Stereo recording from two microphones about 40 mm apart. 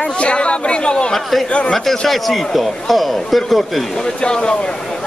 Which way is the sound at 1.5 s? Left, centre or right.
Left.